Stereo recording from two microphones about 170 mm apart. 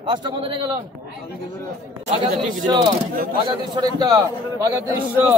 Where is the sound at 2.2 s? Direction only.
30° right (ahead or behind).